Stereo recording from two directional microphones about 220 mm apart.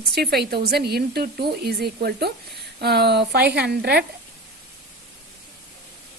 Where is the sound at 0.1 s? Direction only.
45° right (ahead or behind).